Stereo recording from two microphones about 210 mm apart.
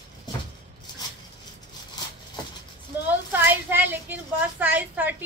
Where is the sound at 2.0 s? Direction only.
20° left (ahead or behind).